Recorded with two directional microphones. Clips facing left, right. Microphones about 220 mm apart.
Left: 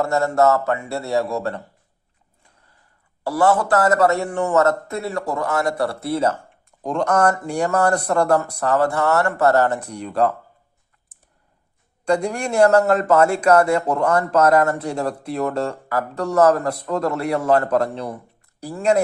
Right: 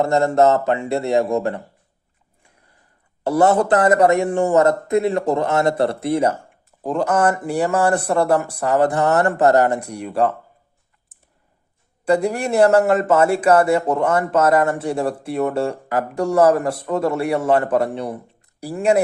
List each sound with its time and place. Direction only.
0.0 s speech: 20° right (ahead or behind)
3.2 s speech: 25° right (ahead or behind)
6.7 s speech: 5° right (ahead or behind)
12.0 s speech: 5° right (ahead or behind)